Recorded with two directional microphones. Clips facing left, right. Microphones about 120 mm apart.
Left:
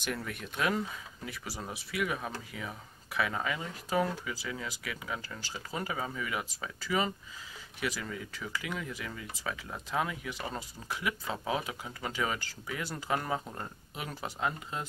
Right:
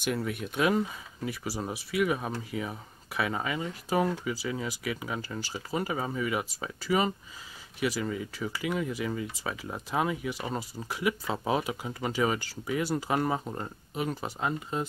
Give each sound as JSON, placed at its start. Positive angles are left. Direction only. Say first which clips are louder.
{"t": 0.3, "sound": "speech", "louder": "right 5 dB", "side_deg": -10}
{"t": 5.7, "sound": "speech", "louder": "right 5 dB", "side_deg": -5}
{"t": 5.9, "sound": "speech", "louder": "right 4 dB", "side_deg": -25}
{"t": 7.8, "sound": "speech", "louder": "right 6 dB", "side_deg": -10}
{"t": 13.9, "sound": "speech", "louder": "right 7 dB", "side_deg": 0}